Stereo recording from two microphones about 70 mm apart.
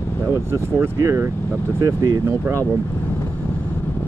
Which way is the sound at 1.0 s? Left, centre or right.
Right.